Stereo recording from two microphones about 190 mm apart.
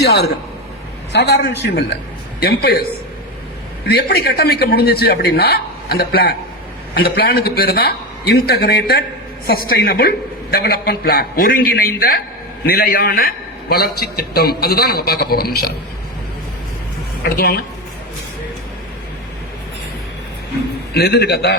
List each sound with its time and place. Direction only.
0.0 s a man's voice: 60° left (ahead or behind)
3.8 s a man's voice: 55° left (ahead or behind)
17.2 s a man's voice: 50° left (ahead or behind)
20.9 s a man's voice: 55° left (ahead or behind)